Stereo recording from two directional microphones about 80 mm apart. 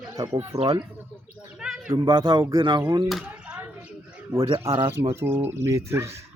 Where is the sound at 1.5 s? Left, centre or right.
Centre.